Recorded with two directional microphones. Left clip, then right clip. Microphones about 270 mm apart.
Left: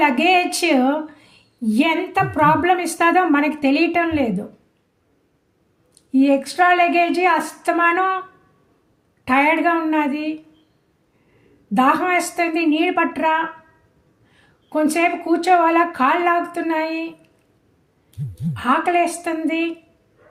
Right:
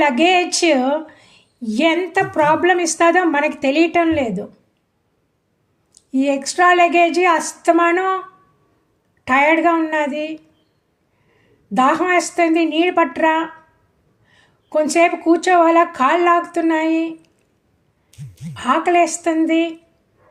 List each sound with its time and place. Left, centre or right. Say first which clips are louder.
0.0 s a woman's voice: right 1 dB; right
6.1 s a woman's voice: left 2 dB; right
9.2 s a woman's voice: right 2 dB; right
11.7 s a woman's voice: right 2 dB; right
14.7 s a woman's voice: right 3 dB; right
18.5 s a woman's voice: right 2 dB; right